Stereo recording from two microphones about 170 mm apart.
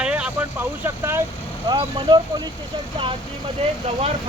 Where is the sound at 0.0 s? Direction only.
5° right (ahead or behind).